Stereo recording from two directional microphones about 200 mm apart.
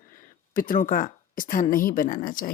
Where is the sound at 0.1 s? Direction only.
45° left (ahead or behind).